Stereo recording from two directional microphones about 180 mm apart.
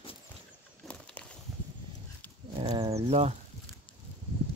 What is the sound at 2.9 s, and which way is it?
Speech, 35° right (ahead or behind).